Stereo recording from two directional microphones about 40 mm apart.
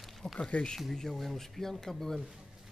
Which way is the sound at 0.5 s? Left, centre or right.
Left.